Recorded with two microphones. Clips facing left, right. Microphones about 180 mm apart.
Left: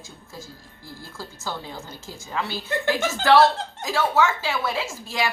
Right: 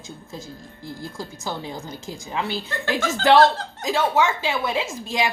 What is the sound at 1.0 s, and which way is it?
A woman's voice, 15° right (ahead or behind).